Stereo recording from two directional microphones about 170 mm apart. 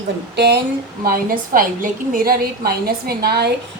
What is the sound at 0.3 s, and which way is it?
Speech, 75° right (ahead or behind).